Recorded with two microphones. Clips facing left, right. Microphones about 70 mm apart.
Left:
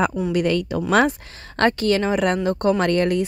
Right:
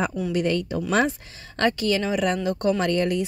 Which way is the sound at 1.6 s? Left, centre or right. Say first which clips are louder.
Left 4 dB; left.